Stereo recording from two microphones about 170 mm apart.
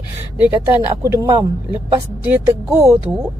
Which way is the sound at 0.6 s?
20° right (ahead or behind).